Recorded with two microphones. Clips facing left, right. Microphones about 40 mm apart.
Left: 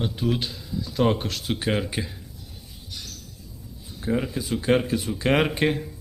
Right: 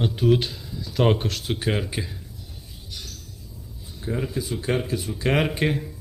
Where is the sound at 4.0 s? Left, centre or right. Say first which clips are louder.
Left 2 dB; centre.